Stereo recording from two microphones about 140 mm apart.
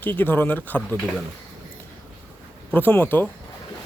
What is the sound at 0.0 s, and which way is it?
Speech, 15° left (ahead or behind).